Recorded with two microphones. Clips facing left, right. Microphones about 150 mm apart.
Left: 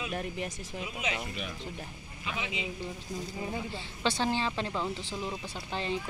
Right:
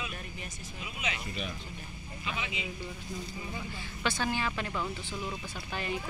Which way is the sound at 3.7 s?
25° left (ahead or behind).